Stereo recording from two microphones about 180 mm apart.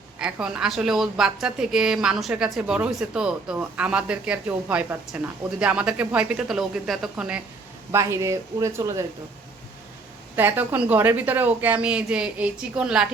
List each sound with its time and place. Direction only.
0.2 s a woman's voice: 5° right (ahead or behind)
7.9 s speech: 15° right (ahead or behind)
10.3 s speech: 10° right (ahead or behind)